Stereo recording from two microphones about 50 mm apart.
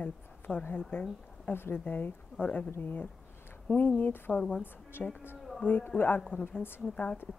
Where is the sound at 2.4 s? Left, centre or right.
Left.